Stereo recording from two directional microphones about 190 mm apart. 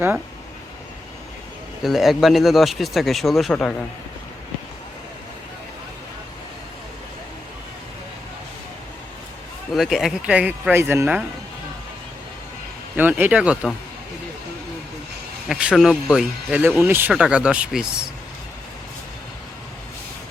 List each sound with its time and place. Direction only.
1.8 s speech: centre (ahead or behind)
9.7 s speech: centre (ahead or behind)
13.0 s speech: 10° right (ahead or behind)
15.4 s speech: 5° right (ahead or behind)